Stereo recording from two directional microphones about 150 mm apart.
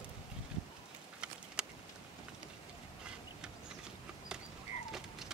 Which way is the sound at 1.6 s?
5° right (ahead or behind).